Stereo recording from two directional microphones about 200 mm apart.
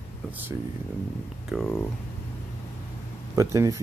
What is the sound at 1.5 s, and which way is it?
Speech, 5° right (ahead or behind).